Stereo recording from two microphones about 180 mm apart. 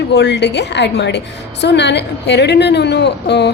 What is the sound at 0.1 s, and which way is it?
A woman's voice, 70° left (ahead or behind).